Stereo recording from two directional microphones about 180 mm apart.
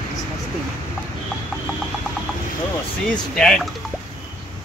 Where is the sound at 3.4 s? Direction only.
Centre (ahead or behind).